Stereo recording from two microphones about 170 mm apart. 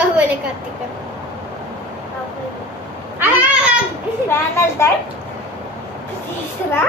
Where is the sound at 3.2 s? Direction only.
10° right (ahead or behind).